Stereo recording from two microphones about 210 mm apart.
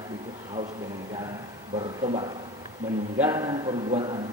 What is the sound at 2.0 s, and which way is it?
Speech, 25° right (ahead or behind).